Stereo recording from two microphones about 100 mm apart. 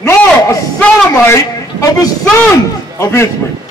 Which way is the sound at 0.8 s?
10° left (ahead or behind).